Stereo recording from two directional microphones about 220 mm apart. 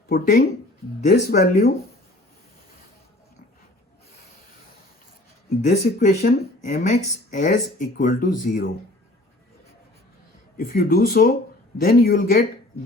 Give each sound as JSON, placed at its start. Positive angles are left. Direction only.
{"t": 0.1, "sound": "speech", "side_deg": 40}
{"t": 5.6, "sound": "speech", "side_deg": 30}
{"t": 10.6, "sound": "speech", "side_deg": 45}